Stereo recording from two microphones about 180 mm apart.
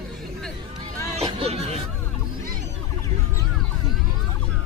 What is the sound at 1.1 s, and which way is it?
Music, 35° right (ahead or behind).